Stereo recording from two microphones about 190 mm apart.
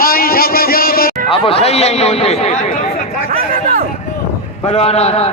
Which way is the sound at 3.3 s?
40° right (ahead or behind).